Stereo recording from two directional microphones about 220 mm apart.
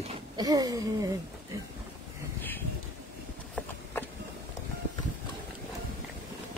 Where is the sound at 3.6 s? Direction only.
5° left (ahead or behind).